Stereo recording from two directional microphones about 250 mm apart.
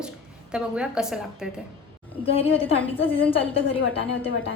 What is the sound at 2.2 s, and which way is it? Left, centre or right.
A woman's voice, left.